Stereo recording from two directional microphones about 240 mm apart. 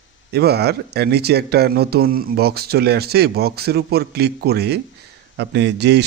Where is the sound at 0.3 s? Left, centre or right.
Right.